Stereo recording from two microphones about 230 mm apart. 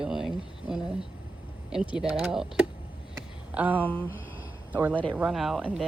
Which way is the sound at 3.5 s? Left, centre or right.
Centre.